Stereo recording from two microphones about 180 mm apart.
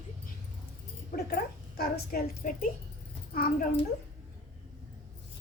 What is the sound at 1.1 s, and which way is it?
Speech, 55° left (ahead or behind).